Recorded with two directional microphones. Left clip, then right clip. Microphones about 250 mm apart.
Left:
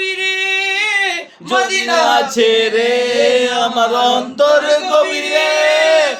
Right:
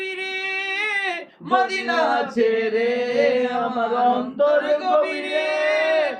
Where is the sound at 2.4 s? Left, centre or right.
Left.